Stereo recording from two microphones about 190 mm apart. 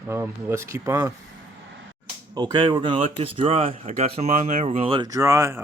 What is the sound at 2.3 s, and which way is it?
Speech, 20° right (ahead or behind).